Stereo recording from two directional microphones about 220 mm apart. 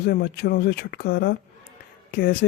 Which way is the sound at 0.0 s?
45° left (ahead or behind).